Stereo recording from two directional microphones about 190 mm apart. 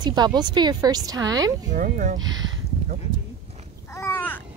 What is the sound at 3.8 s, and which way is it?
Babbling, 15° left (ahead or behind).